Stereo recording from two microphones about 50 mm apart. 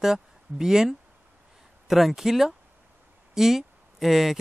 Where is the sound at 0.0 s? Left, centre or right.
Centre.